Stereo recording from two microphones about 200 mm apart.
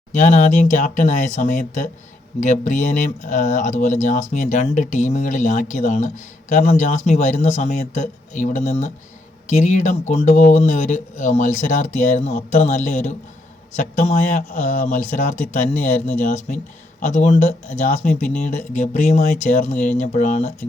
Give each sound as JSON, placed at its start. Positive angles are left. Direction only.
{"t": 0.1, "sound": "speech", "side_deg": 35}